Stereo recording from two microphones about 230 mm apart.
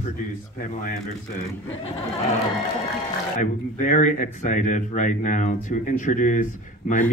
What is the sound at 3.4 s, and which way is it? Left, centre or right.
Speech, left.